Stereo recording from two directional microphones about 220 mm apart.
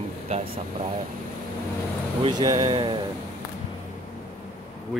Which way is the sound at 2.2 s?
20° right (ahead or behind).